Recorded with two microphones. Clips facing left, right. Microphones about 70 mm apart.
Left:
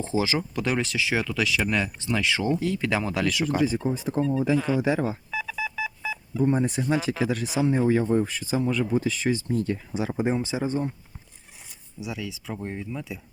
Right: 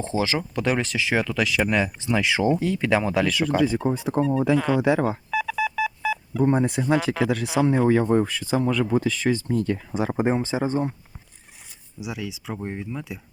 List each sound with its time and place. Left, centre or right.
0.0 s speech: centre
3.8 s speech: right
4.4 s telephone dialing: right
6.9 s speech: right
9.0 s speech: right
12.0 s speech: centre
12.8 s speech: right